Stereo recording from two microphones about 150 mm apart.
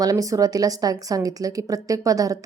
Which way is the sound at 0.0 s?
25° right (ahead or behind).